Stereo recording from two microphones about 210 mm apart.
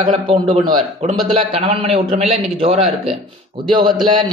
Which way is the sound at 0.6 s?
35° right (ahead or behind).